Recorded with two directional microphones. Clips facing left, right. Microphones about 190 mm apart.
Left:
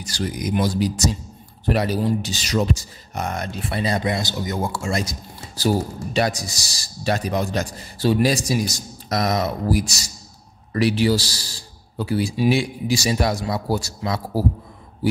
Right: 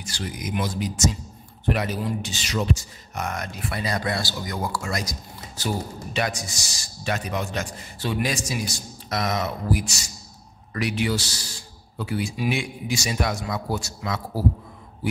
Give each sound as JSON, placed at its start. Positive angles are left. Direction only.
{"t": 0.0, "sound": "speech", "side_deg": 40}